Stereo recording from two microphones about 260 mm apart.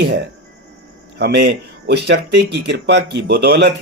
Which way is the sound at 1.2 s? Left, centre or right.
Right.